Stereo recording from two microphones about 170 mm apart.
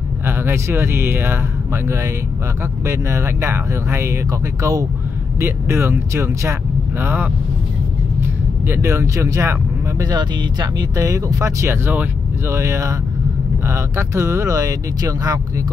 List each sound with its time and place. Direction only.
0.3 s speech: 15° right (ahead or behind)